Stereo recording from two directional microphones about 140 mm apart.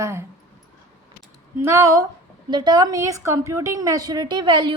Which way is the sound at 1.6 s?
20° right (ahead or behind).